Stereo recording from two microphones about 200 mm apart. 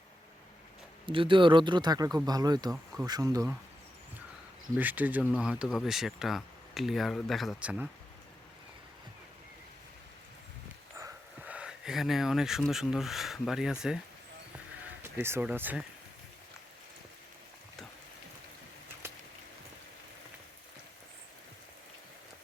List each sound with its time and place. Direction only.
1.0 s speech: 25° right (ahead or behind)
4.8 s speech: 10° right (ahead or behind)
10.9 s speech: 10° right (ahead or behind)
15.0 s speech: 10° right (ahead or behind)